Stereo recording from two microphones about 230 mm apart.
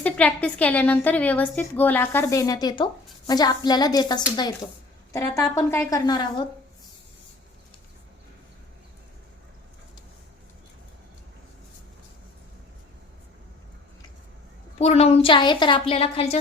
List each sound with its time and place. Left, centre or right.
0.0 s a woman's voice: centre
14.8 s a woman's voice: left